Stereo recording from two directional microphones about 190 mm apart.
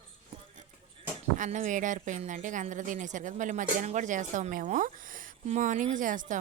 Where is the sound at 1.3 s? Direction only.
45° right (ahead or behind).